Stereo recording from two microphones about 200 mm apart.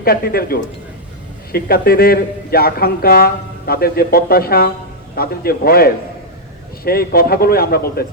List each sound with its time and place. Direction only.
0.0 s a man's voice: 50° left (ahead or behind)